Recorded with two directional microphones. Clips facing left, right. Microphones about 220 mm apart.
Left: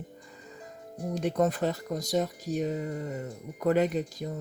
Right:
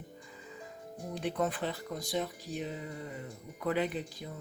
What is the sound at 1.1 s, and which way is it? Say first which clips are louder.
Speech: left 6 dB; 40° left (ahead or behind).